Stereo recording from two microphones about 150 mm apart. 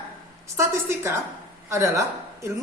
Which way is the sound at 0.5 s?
20° right (ahead or behind).